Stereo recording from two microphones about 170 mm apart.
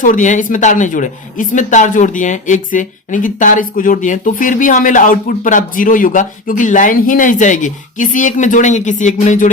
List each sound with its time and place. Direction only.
0.0 s speech: 50° left (ahead or behind)